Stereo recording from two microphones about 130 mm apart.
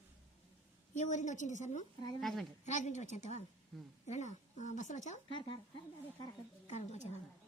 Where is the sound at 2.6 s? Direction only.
65° left (ahead or behind).